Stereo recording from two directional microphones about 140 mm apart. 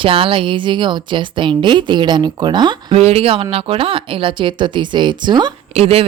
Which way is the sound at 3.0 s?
45° right (ahead or behind).